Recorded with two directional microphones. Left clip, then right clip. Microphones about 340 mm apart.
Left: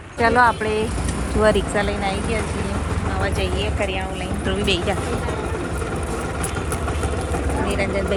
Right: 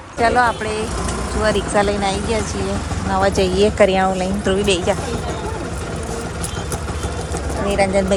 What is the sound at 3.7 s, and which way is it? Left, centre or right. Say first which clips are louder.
Speech: right 10 dB; right.